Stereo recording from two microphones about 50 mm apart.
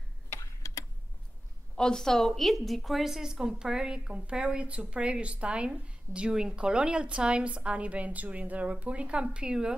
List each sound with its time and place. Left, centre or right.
1.8 s a woman's voice: centre